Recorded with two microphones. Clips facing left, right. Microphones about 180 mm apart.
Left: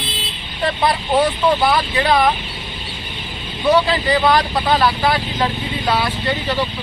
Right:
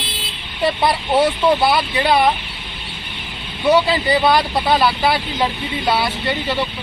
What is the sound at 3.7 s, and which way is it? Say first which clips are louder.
Speech: even; 10° right (ahead or behind).